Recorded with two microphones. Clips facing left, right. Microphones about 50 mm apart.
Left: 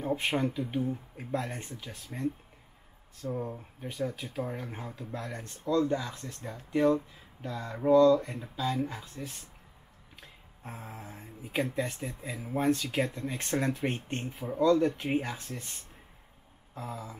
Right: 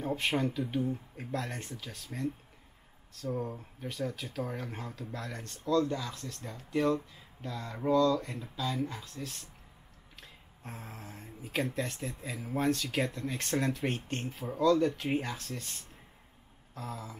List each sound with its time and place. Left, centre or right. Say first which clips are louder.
0.0 s speech: left 1 dB; centre
3.2 s speech: even; centre
10.7 s speech: left 2 dB; centre
16.7 s speech: left 2 dB; centre